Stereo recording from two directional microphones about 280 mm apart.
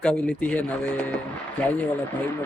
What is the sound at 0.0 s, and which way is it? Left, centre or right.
A man's voice, centre.